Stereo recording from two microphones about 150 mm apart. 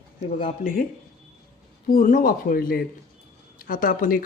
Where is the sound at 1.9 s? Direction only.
65° left (ahead or behind).